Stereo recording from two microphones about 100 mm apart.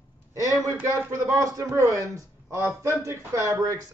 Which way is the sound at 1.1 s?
30° right (ahead or behind).